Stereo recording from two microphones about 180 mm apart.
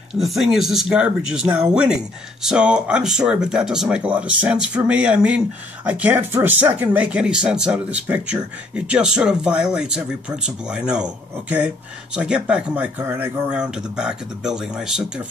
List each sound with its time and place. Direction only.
0.1 s speech: centre (ahead or behind)